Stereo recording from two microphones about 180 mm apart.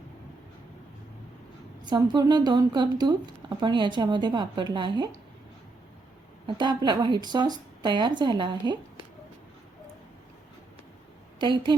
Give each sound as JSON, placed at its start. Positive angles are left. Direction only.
{"t": 1.8, "sound": "a woman's voice", "side_deg": -25}
{"t": 6.6, "sound": "a woman's voice", "side_deg": -25}
{"t": 11.3, "sound": "a woman's voice", "side_deg": -25}